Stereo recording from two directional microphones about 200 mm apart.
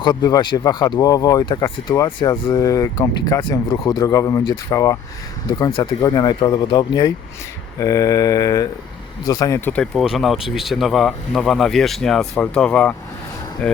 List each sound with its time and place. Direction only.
0.0 s speech: 20° left (ahead or behind); by 13.8 s 5° left (ahead or behind)